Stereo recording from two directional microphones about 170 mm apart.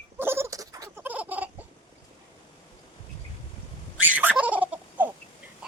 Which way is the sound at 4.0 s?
10° right (ahead or behind).